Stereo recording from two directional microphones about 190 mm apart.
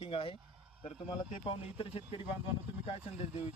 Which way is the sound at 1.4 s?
30° left (ahead or behind).